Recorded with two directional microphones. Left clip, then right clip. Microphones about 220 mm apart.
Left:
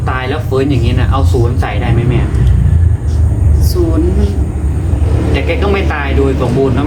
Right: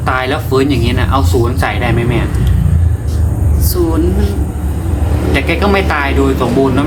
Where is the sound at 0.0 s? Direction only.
45° right (ahead or behind).